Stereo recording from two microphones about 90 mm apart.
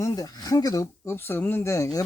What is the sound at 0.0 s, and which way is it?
Speech, 45° left (ahead or behind).